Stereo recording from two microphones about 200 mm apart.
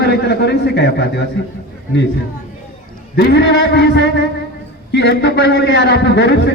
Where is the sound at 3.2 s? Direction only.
60° left (ahead or behind).